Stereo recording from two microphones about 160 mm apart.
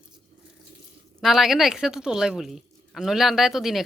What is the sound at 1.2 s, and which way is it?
Speech, centre (ahead or behind).